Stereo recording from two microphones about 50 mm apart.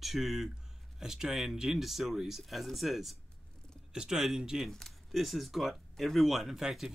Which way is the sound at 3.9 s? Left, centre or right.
Centre.